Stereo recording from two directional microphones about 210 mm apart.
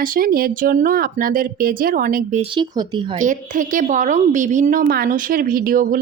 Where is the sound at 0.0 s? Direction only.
45° right (ahead or behind).